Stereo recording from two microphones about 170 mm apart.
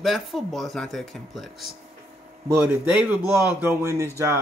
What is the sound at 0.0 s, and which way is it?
Speech, centre (ahead or behind).